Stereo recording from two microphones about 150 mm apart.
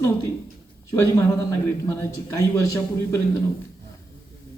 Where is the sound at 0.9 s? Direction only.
20° left (ahead or behind).